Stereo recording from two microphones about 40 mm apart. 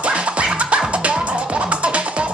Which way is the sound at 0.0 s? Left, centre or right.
Right.